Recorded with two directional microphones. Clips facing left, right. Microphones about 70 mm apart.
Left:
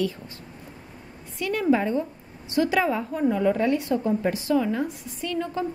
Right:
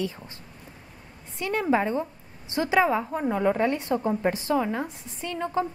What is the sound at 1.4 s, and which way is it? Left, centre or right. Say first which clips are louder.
A woman's voice: left 2 dB; right.